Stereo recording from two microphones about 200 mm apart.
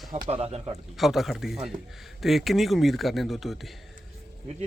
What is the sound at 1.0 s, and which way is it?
Speech, centre (ahead or behind).